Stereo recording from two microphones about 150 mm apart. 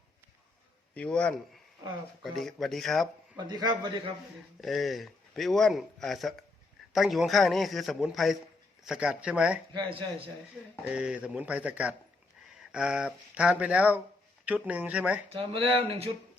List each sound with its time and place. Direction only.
0.9 s a man's voice: 5° left (ahead or behind)
3.3 s a man's voice: 25° right (ahead or behind)
4.6 s a man's voice: centre (ahead or behind)
9.7 s speech: 35° right (ahead or behind)
10.8 s speech: 5° right (ahead or behind)
15.3 s speech: 40° right (ahead or behind)